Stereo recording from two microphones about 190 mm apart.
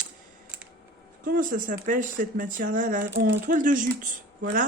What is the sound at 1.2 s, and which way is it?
Speech, 45° right (ahead or behind).